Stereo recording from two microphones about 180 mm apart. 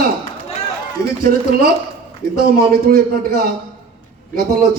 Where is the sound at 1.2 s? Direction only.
55° right (ahead or behind).